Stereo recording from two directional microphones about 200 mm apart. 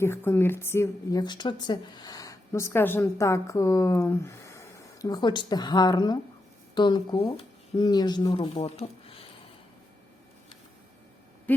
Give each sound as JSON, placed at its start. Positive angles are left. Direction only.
{"t": 0.0, "sound": "speech", "side_deg": 10}
{"t": 11.5, "sound": "owl", "side_deg": 10}